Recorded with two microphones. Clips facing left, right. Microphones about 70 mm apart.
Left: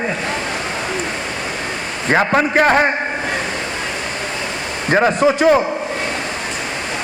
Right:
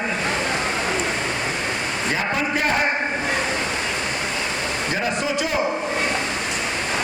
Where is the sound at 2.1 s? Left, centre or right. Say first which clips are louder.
Left 10 dB; left.